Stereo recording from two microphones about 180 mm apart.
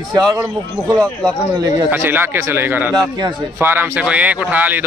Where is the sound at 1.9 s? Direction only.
10° right (ahead or behind).